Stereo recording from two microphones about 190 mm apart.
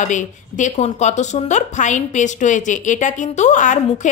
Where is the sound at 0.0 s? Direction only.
40° left (ahead or behind).